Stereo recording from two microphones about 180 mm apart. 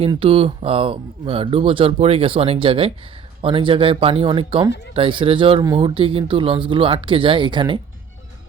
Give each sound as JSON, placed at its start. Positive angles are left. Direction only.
{"t": 0.0, "sound": "speech", "side_deg": -30}